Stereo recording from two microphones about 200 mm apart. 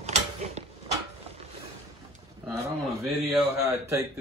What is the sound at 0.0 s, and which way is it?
Mechanisms, 35° right (ahead or behind).